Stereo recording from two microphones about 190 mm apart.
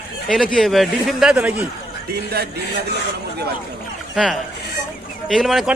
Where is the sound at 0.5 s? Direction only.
Centre (ahead or behind).